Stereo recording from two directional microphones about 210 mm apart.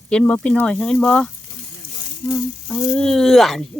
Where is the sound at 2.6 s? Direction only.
5° left (ahead or behind).